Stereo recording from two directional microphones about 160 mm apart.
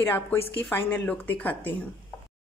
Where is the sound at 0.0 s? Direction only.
10° left (ahead or behind).